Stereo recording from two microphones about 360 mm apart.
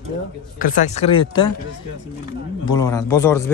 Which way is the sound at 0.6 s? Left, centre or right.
Left.